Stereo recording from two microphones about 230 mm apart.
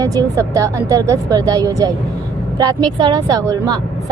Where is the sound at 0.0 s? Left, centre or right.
Centre.